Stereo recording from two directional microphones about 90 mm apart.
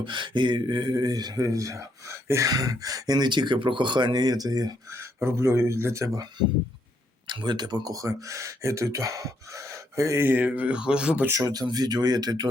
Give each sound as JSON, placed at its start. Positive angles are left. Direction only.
{"t": 0.0, "sound": "speech", "side_deg": -60}
{"t": 4.9, "sound": "speech", "side_deg": -30}
{"t": 7.3, "sound": "speech", "side_deg": -55}
{"t": 10.2, "sound": "speech", "side_deg": -20}
{"t": 11.4, "sound": "speech", "side_deg": -45}